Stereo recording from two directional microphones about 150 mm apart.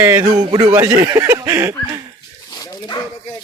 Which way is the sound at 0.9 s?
25° right (ahead or behind).